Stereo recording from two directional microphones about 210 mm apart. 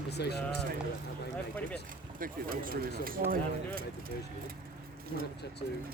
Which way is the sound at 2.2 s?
40° right (ahead or behind).